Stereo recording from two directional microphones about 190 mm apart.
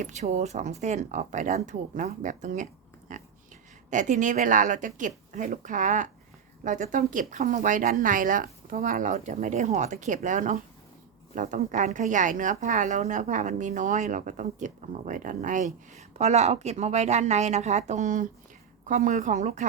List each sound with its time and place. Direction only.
0.0 s speech: 40° right (ahead or behind)
3.1 s a sound: 40° right (ahead or behind)
3.8 s speech: 40° right (ahead or behind)